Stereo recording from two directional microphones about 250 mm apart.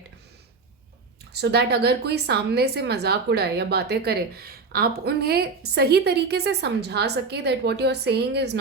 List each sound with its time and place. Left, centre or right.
1.3 s a woman's voice: right